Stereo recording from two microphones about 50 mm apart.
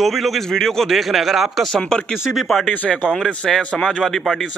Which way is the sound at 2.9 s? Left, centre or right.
Left.